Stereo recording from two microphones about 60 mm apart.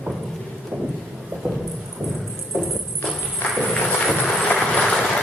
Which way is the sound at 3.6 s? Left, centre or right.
Centre.